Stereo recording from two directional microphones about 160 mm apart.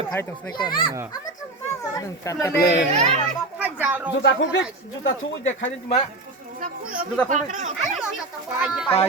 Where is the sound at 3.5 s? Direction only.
10° right (ahead or behind).